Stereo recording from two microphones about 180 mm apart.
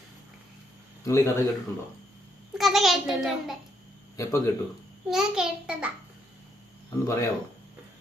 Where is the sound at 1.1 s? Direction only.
15° left (ahead or behind).